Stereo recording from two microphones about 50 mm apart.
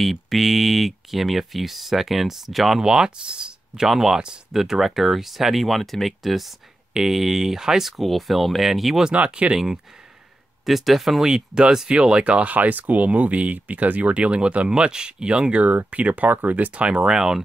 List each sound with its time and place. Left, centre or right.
0.0 s speech: centre
2.8 s speech: centre
7.9 s speech: centre
9.1 s speech: right
10.6 s speech: centre
11.2 s speech: centre
15.6 s speech: right; by 17.4 s centre